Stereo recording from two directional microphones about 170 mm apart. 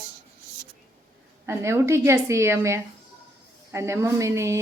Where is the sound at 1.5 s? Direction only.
15° right (ahead or behind).